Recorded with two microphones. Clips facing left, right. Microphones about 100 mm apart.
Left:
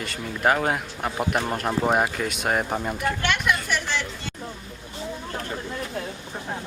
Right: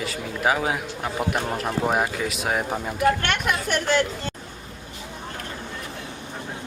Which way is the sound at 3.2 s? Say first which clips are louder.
Left 1 dB; 50° right (ahead or behind).